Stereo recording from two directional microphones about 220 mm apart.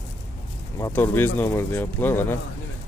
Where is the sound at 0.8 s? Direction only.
10° left (ahead or behind).